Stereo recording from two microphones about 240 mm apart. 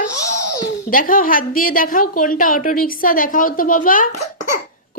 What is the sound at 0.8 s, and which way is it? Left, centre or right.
A woman's voice, left.